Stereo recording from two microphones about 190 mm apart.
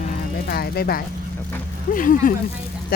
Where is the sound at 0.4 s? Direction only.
55° left (ahead or behind).